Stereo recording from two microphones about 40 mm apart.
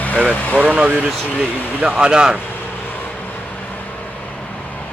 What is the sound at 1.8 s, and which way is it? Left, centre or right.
Speech, right.